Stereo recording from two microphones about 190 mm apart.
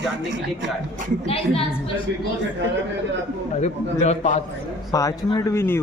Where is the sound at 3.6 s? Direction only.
35° left (ahead or behind).